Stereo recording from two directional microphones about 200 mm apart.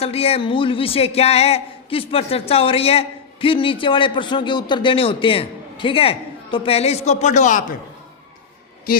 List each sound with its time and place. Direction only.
0.0 s speech: 30° left (ahead or behind)